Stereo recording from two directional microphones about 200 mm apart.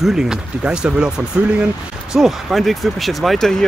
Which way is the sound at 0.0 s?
5° right (ahead or behind).